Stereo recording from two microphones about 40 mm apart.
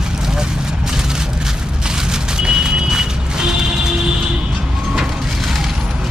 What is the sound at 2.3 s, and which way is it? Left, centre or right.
Music, centre.